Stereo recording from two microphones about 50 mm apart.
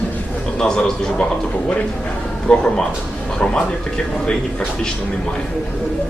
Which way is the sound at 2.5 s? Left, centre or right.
Centre.